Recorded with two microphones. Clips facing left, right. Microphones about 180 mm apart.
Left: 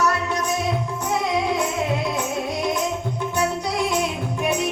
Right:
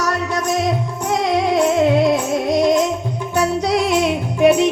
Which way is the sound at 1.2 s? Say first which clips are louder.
Right 8 dB; 85° right.